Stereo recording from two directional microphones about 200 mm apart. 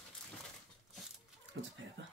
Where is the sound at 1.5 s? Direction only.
65° right (ahead or behind).